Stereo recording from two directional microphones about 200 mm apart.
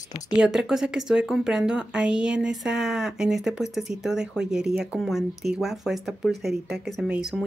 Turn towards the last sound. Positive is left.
turn(degrees=-5)  # may be behind; listen again after turning